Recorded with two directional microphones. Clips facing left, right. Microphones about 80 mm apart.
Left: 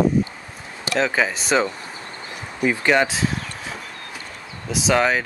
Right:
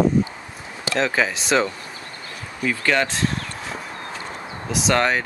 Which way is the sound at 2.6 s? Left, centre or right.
Centre.